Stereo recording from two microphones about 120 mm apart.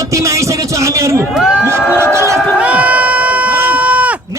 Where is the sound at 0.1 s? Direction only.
25° right (ahead or behind).